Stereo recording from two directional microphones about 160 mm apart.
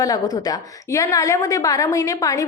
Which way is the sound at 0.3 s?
25° left (ahead or behind).